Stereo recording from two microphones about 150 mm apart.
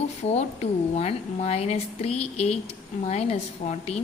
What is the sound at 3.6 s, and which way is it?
Speech, 60° left (ahead or behind).